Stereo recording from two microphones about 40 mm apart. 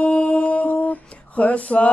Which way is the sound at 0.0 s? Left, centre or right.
Left.